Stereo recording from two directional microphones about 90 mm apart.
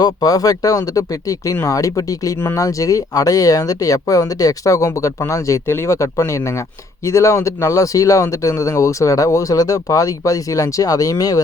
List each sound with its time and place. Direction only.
0.0 s speech: 45° left (ahead or behind)
2.4 s speech: 25° left (ahead or behind)
2.6 s speech: 40° left (ahead or behind)